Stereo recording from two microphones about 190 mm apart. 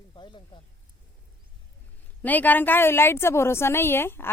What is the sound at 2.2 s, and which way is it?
A woman's voice, 10° left (ahead or behind).